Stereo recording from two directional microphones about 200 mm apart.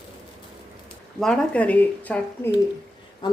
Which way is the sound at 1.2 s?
5° left (ahead or behind).